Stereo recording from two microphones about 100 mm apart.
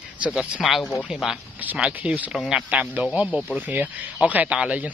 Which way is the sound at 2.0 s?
15° right (ahead or behind).